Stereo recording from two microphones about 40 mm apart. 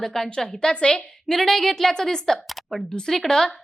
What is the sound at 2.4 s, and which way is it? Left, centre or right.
Speech, centre.